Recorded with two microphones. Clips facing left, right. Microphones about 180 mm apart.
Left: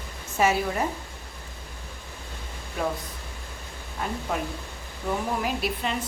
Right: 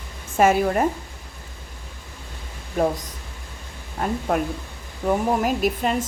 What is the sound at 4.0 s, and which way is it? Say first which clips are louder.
A woman's voice: right 7 dB; 45° right (ahead or behind).